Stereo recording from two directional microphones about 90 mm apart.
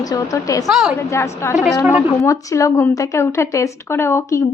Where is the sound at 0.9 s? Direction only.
30° left (ahead or behind).